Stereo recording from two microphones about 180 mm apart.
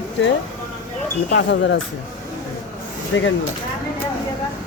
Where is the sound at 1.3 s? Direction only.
85° left.